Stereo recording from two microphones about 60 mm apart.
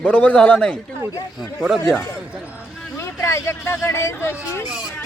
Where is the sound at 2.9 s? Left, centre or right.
Left.